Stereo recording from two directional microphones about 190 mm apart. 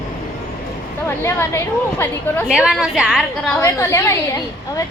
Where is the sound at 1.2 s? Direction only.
15° left (ahead or behind).